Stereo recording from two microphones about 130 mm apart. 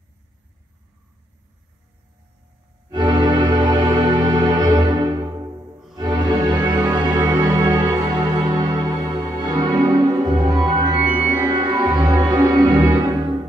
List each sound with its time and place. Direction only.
2.9 s music: 35° right (ahead or behind)